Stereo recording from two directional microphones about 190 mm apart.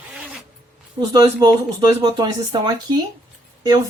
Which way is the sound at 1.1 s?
20° right (ahead or behind).